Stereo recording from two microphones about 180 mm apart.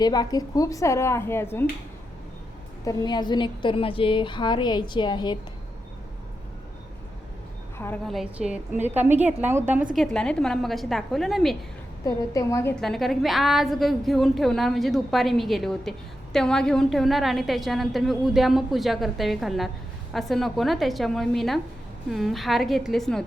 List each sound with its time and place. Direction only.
0.0 s a woman's voice: 20° left (ahead or behind)
2.8 s a woman's voice: 25° left (ahead or behind)
8.0 s a woman's voice: centre (ahead or behind)
9.9 s a woman's voice: centre (ahead or behind)
12.0 s a woman's voice: 20° left (ahead or behind)
12.7 s a woman's voice: centre (ahead or behind)